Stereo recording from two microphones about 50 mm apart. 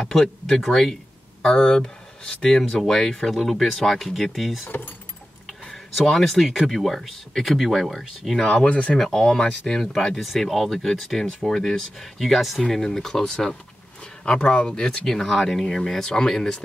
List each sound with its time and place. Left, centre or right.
0.0 s speech: centre
1.4 s speech: centre
4.6 s speech: left
5.5 s speech: centre
8.5 s speech: left
8.9 s speech: centre